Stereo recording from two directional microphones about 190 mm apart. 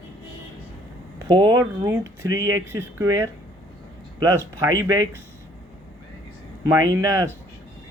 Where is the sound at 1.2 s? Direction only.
20° right (ahead or behind).